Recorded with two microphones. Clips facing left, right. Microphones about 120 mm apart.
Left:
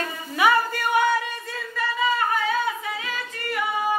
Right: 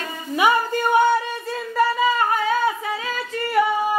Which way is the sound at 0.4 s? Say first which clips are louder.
Right 2 dB; 25° right (ahead or behind).